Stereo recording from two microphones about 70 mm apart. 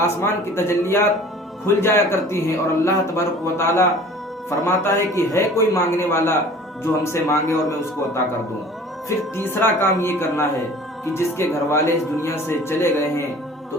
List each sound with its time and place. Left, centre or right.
0.0 s a man's voice: left
9.0 s a man's voice: left